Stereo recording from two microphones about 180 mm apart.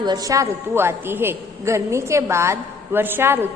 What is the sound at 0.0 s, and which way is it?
A man's voice, 20° right (ahead or behind).